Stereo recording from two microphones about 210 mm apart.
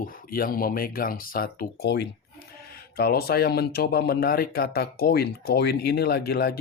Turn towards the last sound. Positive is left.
turn(degrees=50)  # may be behind; listen again after turning